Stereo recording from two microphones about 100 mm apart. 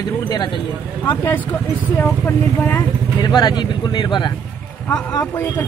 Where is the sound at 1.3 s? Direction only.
20° left (ahead or behind).